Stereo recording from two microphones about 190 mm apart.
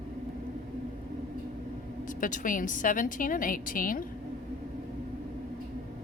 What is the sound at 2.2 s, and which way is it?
A woman's voice, 45° left (ahead or behind).